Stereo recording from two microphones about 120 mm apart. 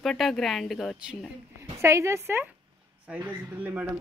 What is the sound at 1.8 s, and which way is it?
A woman's voice, 25° right (ahead or behind).